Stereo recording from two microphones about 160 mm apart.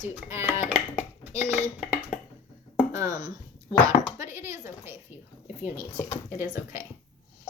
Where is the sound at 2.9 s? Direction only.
20° right (ahead or behind).